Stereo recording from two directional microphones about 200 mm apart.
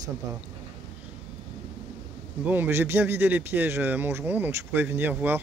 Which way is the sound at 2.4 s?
10° right (ahead or behind).